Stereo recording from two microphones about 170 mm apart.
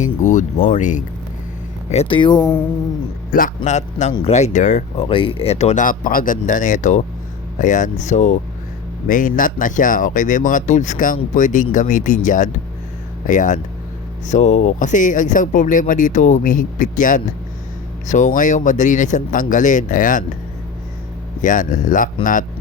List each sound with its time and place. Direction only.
0.2 s speech: 45° left (ahead or behind)
1.9 s speech: 35° left (ahead or behind)
3.3 s speech: 50° left (ahead or behind)
5.0 s speech: 30° left (ahead or behind); by 20.2 s 50° left (ahead or behind)
21.4 s speech: 50° left (ahead or behind)